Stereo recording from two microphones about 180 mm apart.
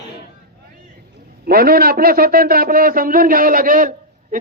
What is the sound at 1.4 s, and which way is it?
A man's voice, 55° right (ahead or behind).